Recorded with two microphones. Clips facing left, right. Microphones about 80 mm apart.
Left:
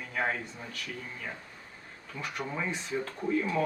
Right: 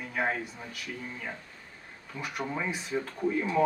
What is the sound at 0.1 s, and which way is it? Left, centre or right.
Speech, centre.